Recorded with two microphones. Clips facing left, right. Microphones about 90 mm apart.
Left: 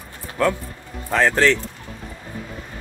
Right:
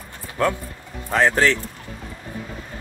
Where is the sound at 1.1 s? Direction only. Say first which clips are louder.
Left 1 dB; 15° right (ahead or behind).